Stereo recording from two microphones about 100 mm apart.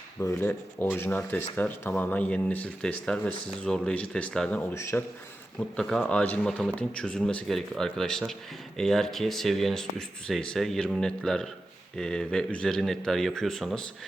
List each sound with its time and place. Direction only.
0.2 s speech: 25° left (ahead or behind); by 4.6 s 10° left (ahead or behind)
4.7 s speech: 25° left (ahead or behind)
5.5 s speech: 5° left (ahead or behind)